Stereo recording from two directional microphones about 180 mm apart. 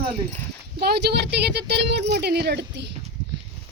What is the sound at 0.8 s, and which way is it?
Speech, 65° right (ahead or behind).